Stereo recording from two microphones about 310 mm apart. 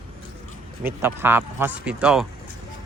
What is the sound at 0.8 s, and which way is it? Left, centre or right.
Speech, centre.